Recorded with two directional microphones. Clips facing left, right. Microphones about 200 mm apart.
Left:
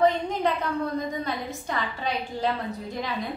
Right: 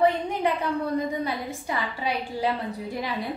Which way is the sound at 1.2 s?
10° right (ahead or behind).